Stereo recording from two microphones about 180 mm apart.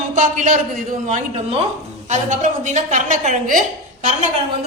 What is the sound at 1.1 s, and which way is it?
A man's voice, 35° right (ahead or behind).